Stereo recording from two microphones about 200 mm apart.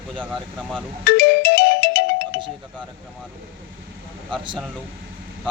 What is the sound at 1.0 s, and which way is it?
Music, 55° left (ahead or behind).